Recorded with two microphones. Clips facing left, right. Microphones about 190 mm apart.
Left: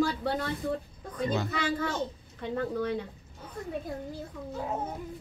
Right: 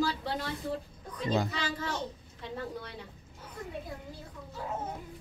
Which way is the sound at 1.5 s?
55° left (ahead or behind).